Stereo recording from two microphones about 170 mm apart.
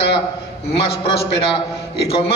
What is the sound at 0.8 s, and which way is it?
A man's voice, 35° left (ahead or behind).